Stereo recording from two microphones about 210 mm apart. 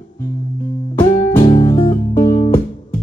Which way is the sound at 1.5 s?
25° left (ahead or behind).